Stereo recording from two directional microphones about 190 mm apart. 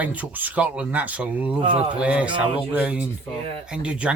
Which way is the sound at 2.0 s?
5° right (ahead or behind).